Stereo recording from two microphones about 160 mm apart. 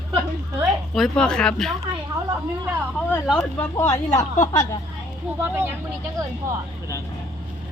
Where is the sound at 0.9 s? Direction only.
5° left (ahead or behind).